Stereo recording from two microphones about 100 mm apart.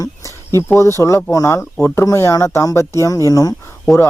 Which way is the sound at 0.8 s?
30° left (ahead or behind).